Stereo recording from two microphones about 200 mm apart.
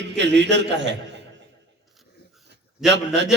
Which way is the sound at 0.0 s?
60° right (ahead or behind).